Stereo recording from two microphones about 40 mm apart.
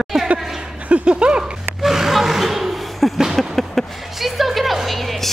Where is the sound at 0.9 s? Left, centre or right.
Right.